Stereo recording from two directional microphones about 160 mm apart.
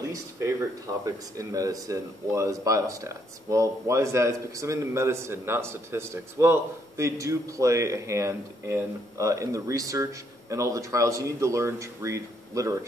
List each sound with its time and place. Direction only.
0.1 s speech: 20° right (ahead or behind)